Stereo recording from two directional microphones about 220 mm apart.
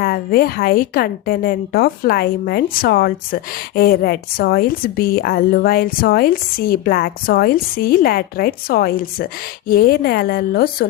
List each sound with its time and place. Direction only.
0.0 s a woman's voice: 45° left (ahead or behind)